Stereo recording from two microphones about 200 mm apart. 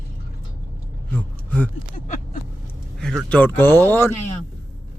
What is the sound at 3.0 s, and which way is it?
Speech, 5° left (ahead or behind).